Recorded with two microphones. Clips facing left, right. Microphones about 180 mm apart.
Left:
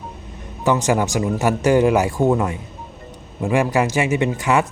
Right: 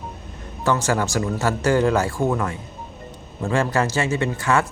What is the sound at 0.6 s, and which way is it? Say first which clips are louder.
A man's voice: left 3 dB; 15° left (ahead or behind).